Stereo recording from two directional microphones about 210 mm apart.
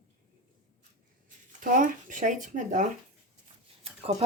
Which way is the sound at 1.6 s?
40° right (ahead or behind).